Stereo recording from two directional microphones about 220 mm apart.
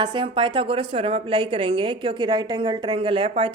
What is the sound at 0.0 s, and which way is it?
A woman's voice, 20° right (ahead or behind).